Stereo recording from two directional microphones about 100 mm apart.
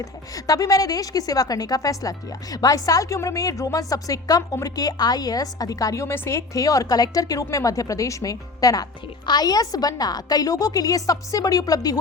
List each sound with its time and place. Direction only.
0.0 s a woman's voice: 35° left (ahead or behind)